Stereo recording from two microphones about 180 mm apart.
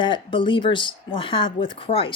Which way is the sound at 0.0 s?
25° left (ahead or behind).